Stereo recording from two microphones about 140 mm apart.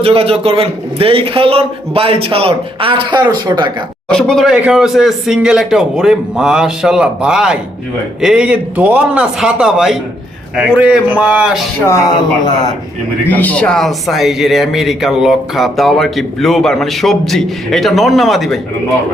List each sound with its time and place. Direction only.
0.0 s a man's voice: 45° right (ahead or behind)
4.1 s a man's voice: 5° left (ahead or behind)
13.2 s speech: 10° left (ahead or behind)